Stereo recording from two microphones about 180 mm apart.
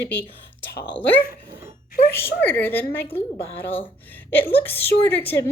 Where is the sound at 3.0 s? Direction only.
30° left (ahead or behind).